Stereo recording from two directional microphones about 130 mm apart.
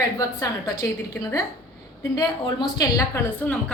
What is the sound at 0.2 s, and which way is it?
Speech, 25° left (ahead or behind).